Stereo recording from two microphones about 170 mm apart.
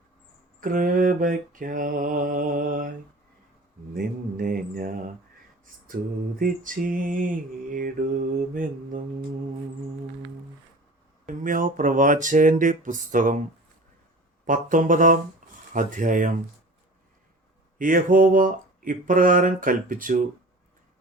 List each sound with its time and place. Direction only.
0.6 s speech: 55° right (ahead or behind)
3.9 s mantra: 55° right (ahead or behind)
6.4 s speech: 50° right (ahead or behind)
11.3 s speech: 50° right (ahead or behind)
14.4 s speech: 50° right (ahead or behind)
17.7 s speech: 50° right (ahead or behind)